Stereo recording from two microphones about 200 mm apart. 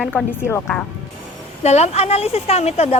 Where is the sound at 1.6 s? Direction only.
35° left (ahead or behind).